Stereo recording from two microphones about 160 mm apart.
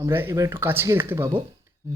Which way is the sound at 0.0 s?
15° right (ahead or behind).